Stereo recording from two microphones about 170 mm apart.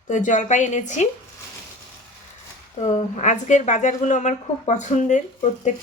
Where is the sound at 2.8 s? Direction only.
40° left (ahead or behind).